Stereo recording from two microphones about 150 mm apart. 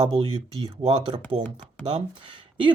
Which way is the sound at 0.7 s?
35° right (ahead or behind).